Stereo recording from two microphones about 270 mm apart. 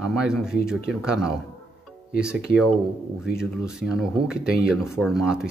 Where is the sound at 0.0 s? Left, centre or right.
Centre.